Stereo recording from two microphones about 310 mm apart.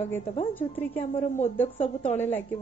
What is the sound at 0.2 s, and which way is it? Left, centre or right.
A woman's voice, centre.